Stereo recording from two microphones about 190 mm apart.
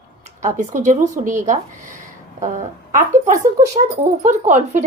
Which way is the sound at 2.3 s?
40° right (ahead or behind).